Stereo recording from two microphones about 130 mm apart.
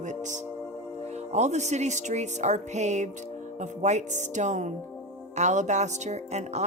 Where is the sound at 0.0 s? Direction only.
70° right (ahead or behind).